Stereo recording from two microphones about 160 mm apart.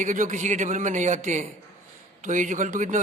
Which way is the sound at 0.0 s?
55° right (ahead or behind).